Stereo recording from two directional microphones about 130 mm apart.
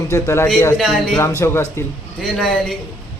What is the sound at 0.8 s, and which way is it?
Speech, centre (ahead or behind).